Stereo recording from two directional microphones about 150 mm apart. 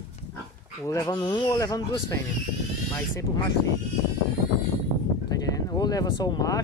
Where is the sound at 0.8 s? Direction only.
20° left (ahead or behind).